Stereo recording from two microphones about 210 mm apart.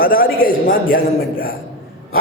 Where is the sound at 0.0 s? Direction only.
45° left (ahead or behind).